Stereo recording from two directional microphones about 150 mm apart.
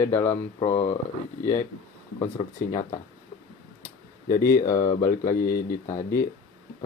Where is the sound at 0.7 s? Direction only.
45° left (ahead or behind).